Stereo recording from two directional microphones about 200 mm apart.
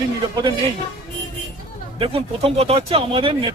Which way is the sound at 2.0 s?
30° right (ahead or behind).